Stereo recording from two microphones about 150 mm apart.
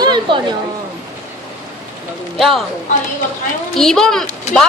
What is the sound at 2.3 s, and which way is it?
Speech, centre (ahead or behind).